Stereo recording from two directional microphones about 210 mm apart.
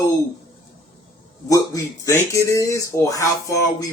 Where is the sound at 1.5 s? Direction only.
15° left (ahead or behind).